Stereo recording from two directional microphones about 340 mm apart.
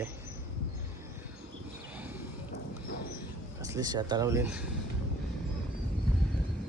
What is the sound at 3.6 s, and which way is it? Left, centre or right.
Speech, centre.